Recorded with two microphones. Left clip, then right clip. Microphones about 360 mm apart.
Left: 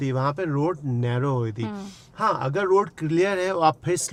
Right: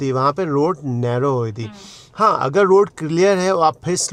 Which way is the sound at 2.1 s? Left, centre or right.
Right.